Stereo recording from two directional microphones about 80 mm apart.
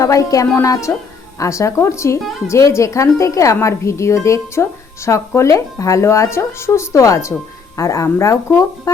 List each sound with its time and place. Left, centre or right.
0.0 s music: left
0.5 s a woman's voice: left